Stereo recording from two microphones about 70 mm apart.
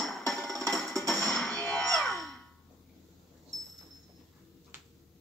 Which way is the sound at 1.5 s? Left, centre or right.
Centre.